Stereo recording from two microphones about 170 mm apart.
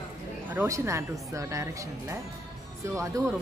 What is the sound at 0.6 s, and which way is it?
Speech, 20° right (ahead or behind).